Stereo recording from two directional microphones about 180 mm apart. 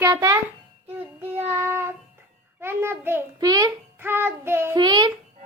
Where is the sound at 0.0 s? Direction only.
20° right (ahead or behind).